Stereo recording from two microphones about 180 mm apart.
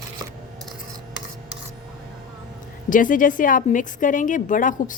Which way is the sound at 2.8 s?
45° left (ahead or behind).